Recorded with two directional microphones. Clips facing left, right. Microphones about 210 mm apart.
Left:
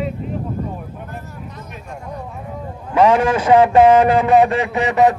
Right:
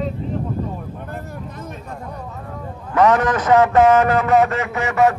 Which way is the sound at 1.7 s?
15° left (ahead or behind).